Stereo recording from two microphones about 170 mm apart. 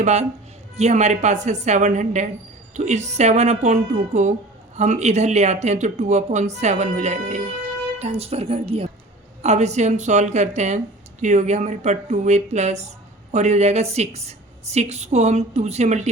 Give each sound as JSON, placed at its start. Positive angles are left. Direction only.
{"t": 0.0, "sound": "a woman's voice", "side_deg": -40}